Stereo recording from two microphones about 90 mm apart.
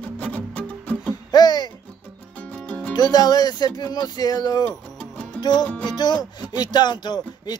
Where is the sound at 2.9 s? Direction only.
50° left (ahead or behind).